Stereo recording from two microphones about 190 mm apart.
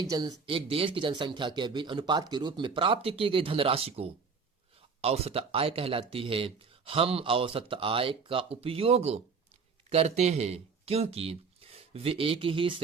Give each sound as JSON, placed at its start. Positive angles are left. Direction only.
{"t": 0.0, "sound": "speech", "side_deg": -20}